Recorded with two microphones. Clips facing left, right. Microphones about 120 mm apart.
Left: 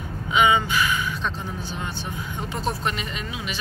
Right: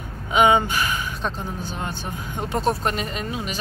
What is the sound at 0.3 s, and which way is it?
Speech, 50° right (ahead or behind).